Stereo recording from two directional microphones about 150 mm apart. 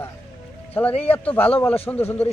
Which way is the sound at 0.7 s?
10° left (ahead or behind).